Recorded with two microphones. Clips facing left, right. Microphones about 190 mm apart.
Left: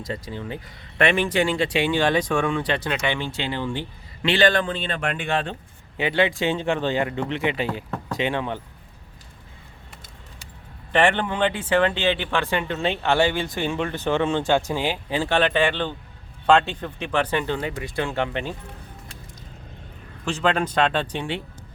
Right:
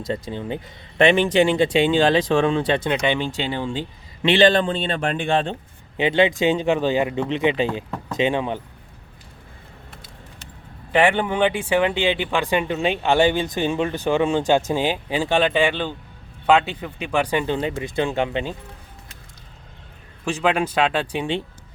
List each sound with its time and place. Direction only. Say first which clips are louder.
0.0 s speech: right 4 dB; 25° right (ahead or behind)
10.9 s speech: right 2 dB; 10° right (ahead or behind)
20.2 s speech: right 2 dB; 10° right (ahead or behind)